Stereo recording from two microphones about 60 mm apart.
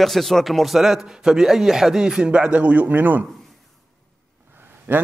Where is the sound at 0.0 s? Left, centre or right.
Centre; by 3.3 s right.